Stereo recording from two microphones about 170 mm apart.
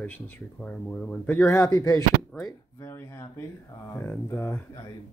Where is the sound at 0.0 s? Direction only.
10° left (ahead or behind).